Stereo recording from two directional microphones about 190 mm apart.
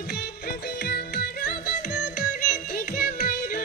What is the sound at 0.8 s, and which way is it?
Music, 55° left (ahead or behind).